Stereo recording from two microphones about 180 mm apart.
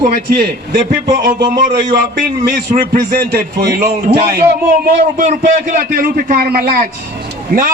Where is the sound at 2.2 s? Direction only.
55° right (ahead or behind).